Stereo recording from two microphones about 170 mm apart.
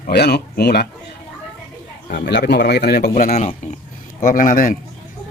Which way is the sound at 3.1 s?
50° left (ahead or behind).